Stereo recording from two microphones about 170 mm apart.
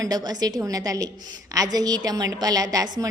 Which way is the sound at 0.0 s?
20° right (ahead or behind).